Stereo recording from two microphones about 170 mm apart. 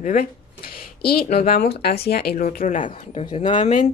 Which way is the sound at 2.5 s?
50° left (ahead or behind).